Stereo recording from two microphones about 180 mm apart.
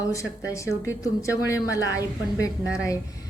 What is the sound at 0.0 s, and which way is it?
A woman's voice, 15° left (ahead or behind).